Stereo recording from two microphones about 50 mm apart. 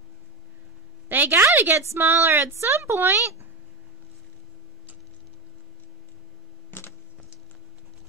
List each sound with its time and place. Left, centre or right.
1.0 s a woman's voice: right
1.8 s a woman's voice: right